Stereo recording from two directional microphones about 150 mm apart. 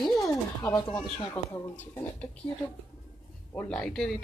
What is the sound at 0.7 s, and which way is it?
Speech, 5° left (ahead or behind).